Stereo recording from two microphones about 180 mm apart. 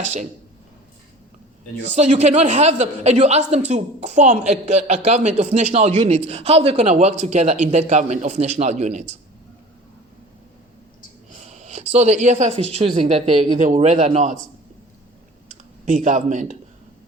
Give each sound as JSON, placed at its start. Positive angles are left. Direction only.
{"t": 0.0, "sound": "a man's voice", "side_deg": -40}
{"t": 1.8, "sound": "a man's voice", "side_deg": -40}
{"t": 11.3, "sound": "a sound", "side_deg": -40}
{"t": 11.9, "sound": "a man's voice", "side_deg": -40}
{"t": 15.9, "sound": "a man's voice", "side_deg": -45}